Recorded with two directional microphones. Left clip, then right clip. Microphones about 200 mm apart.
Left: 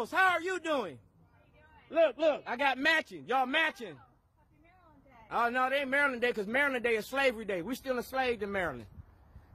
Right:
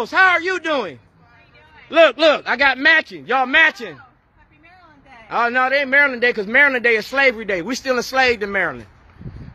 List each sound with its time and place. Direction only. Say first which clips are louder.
0.0 s a man's voice: right 13 dB; 5° left (ahead or behind)
1.9 s a man's voice: right 15 dB; 15° right (ahead or behind); by 4.0 s centre (ahead or behind)
5.3 s a man's voice: right 13 dB; centre (ahead or behind)